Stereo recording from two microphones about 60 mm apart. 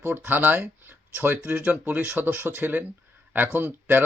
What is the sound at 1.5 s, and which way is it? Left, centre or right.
Speech, right.